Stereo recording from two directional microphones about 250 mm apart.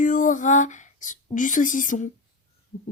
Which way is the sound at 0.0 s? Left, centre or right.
Left.